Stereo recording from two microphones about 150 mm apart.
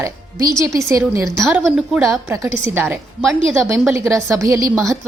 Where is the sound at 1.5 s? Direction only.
5° right (ahead or behind).